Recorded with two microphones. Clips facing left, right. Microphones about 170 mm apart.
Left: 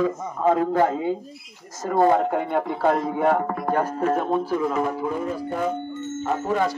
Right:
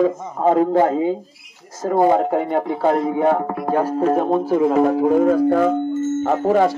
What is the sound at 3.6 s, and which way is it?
Speech, 15° right (ahead or behind).